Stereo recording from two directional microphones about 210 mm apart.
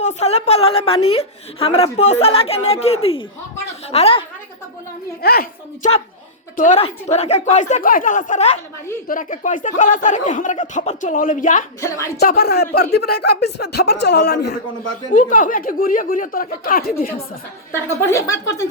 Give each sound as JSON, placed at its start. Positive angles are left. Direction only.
{"t": 0.0, "sound": "a woman's voice", "side_deg": 30}
{"t": 5.2, "sound": "speech", "side_deg": 45}
{"t": 6.6, "sound": "speech", "side_deg": 30}
{"t": 11.8, "sound": "a woman's voice", "side_deg": 15}
{"t": 12.2, "sound": "speech", "side_deg": 45}
{"t": 15.1, "sound": "speech", "side_deg": 40}
{"t": 17.7, "sound": "a woman's voice", "side_deg": 10}